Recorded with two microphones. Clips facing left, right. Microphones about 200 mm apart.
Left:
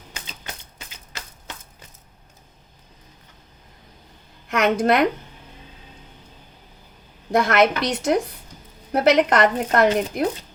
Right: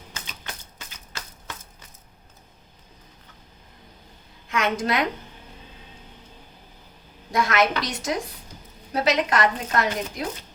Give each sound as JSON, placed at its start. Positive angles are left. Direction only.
{"t": 4.5, "sound": "speech", "side_deg": 60}
{"t": 7.3, "sound": "speech", "side_deg": 55}